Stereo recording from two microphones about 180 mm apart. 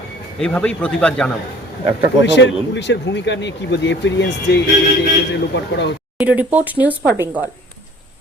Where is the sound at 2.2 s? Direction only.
80° left.